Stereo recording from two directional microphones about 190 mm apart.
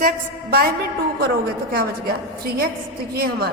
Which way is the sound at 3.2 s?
55° right (ahead or behind).